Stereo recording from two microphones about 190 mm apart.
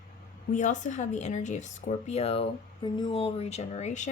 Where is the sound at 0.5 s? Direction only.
40° left (ahead or behind).